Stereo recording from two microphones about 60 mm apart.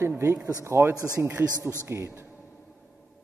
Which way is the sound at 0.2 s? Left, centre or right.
Right.